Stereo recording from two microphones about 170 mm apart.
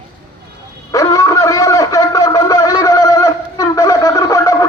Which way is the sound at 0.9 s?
20° left (ahead or behind).